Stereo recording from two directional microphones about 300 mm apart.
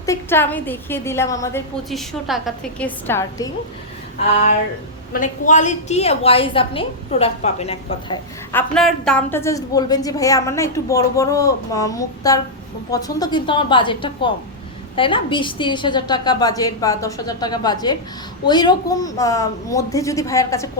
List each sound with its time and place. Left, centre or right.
0.0 s a woman's voice: centre
5.1 s a woman's voice: left
8.7 s a woman's voice: centre